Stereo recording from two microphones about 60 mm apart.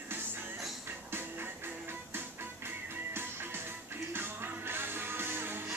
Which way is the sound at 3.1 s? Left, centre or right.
Right.